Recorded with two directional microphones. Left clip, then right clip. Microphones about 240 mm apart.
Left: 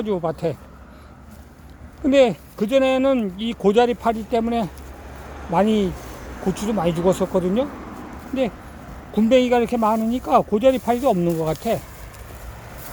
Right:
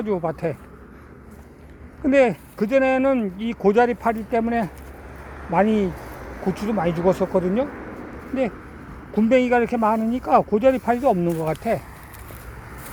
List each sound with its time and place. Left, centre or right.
0.0 s speech: centre
2.0 s speech: centre
9.1 s speech: centre